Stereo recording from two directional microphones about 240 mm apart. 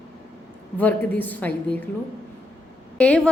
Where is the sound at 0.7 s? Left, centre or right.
Centre.